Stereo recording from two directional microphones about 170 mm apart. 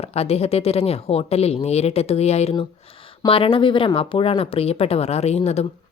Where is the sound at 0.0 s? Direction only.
35° left (ahead or behind).